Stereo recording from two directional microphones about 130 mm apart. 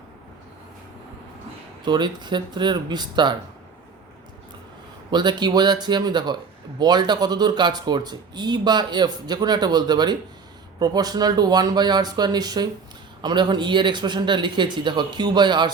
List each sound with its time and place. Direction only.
1.8 s speech: 35° right (ahead or behind)
5.1 s speech: 35° right (ahead or behind)